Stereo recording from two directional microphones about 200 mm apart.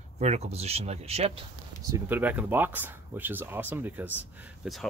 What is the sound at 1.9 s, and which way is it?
Speech, 10° right (ahead or behind).